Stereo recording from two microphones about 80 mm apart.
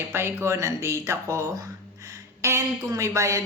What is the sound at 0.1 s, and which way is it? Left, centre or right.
A woman's voice, right.